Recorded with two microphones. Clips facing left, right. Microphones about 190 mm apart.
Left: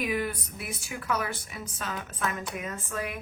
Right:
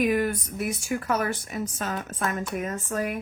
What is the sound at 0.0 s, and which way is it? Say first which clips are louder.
Speech: right 6 dB; 50° right (ahead or behind).